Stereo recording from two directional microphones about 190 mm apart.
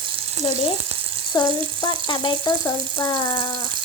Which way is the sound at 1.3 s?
20° left (ahead or behind).